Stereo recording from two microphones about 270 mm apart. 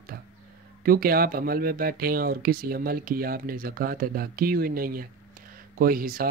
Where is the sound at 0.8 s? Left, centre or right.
Right.